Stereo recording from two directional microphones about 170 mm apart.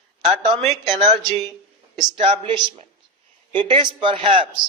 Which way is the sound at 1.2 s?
Centre (ahead or behind).